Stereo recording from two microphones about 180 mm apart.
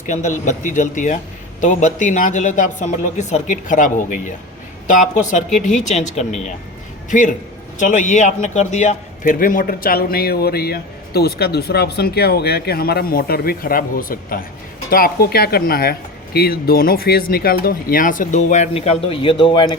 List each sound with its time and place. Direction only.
0.0 s a man's voice: 45° left (ahead or behind); by 19.7 s 25° left (ahead or behind)